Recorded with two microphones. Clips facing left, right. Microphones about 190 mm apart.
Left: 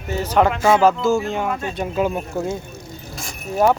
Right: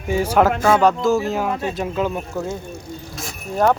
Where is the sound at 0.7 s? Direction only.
5° left (ahead or behind).